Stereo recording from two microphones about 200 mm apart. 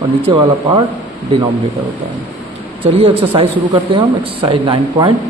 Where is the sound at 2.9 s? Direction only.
30° right (ahead or behind).